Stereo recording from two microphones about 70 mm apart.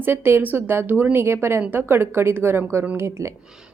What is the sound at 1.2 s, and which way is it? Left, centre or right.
Speech, right.